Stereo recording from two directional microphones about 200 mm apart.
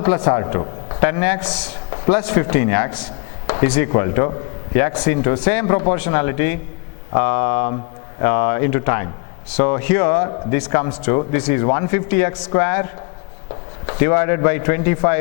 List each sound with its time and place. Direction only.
0.0 s speech: 15° left (ahead or behind)